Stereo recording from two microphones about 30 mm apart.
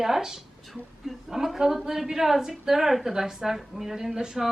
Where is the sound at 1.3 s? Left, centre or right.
Centre.